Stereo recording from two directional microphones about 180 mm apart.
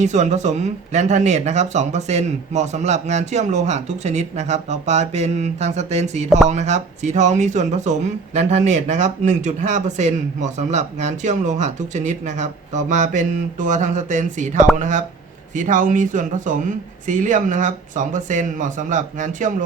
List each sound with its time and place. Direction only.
0.0 s speech: 40° right (ahead or behind)